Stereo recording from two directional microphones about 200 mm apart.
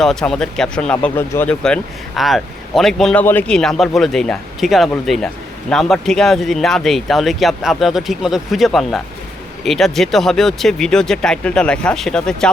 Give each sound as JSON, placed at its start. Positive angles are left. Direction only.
{"t": 0.0, "sound": "speech", "side_deg": 0}